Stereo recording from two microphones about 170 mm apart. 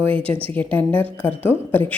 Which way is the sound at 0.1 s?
35° right (ahead or behind).